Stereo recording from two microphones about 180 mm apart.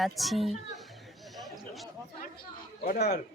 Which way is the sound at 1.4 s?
Centre (ahead or behind).